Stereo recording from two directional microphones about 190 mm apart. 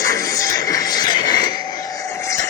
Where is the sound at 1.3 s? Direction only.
20° left (ahead or behind).